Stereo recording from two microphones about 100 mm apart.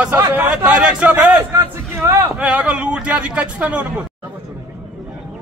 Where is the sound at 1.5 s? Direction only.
30° right (ahead or behind).